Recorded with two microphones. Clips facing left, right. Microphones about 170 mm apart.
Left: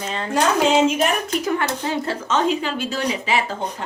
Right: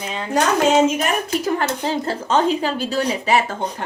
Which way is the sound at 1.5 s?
35° right (ahead or behind).